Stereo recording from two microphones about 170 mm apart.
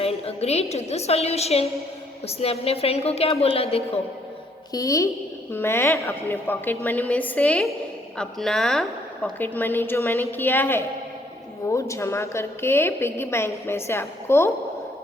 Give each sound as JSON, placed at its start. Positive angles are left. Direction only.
{"t": 0.0, "sound": "a woman's voice", "side_deg": 35}
{"t": 4.7, "sound": "a woman's voice", "side_deg": 20}